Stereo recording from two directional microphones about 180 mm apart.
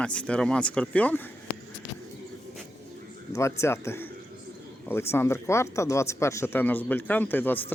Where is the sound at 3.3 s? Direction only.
15° left (ahead or behind).